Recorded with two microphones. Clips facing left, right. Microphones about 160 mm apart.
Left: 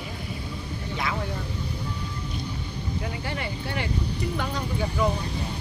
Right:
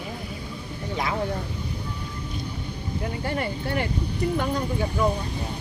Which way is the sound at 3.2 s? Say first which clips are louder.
Right 4 dB; 50° right (ahead or behind).